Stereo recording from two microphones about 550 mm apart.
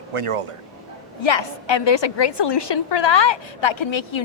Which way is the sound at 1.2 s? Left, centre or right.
Left.